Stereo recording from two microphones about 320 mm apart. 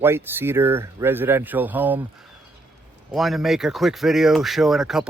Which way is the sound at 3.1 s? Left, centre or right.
Centre.